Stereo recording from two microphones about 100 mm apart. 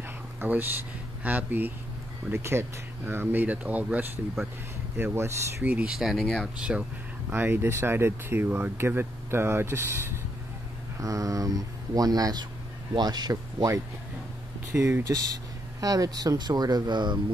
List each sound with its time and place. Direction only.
0.4 s speech: 20° right (ahead or behind)
5.6 s speech: 10° right (ahead or behind)
7.2 s speech: 20° right (ahead or behind)
11.0 s speech: 35° right (ahead or behind)